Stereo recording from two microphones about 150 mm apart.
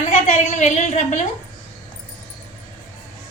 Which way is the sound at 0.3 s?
50° left (ahead or behind).